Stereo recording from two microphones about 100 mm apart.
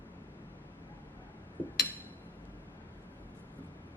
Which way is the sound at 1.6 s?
20° left (ahead or behind).